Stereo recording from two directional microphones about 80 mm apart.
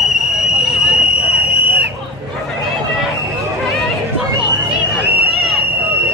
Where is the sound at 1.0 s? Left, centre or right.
Centre.